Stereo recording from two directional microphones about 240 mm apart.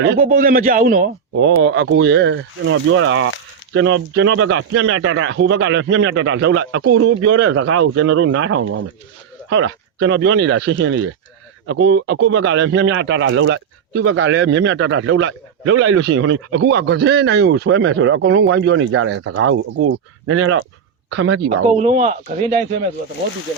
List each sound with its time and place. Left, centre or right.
0.2 s a man's voice: right
1.4 s speech: right
21.7 s speech: right